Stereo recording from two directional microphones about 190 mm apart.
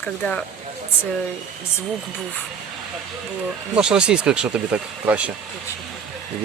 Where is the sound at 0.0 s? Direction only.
5° left (ahead or behind).